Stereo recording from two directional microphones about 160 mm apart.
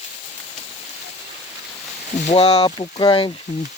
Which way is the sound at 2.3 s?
40° left (ahead or behind).